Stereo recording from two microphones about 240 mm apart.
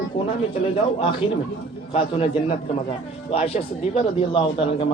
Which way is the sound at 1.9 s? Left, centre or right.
Left.